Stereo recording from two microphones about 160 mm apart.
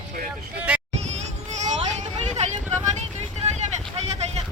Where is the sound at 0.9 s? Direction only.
45° right (ahead or behind).